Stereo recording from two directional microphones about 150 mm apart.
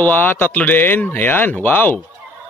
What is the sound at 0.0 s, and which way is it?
Speech, 10° left (ahead or behind).